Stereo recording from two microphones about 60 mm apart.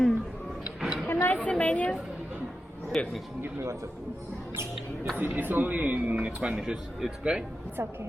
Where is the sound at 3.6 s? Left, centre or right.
Right.